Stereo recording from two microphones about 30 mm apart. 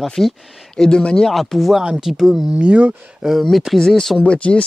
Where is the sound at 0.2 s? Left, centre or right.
Centre.